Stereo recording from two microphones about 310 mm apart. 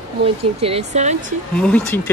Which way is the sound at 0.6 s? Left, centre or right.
Centre.